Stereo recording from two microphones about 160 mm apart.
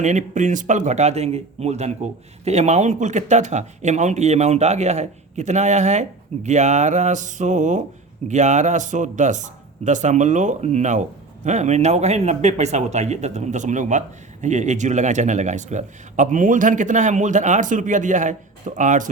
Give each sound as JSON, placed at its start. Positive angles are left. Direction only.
{"t": 0.0, "sound": "speech", "side_deg": -50}